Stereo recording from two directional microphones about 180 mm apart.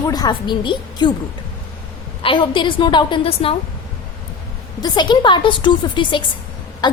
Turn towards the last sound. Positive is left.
turn(degrees=25)  # may be behind; listen again after turning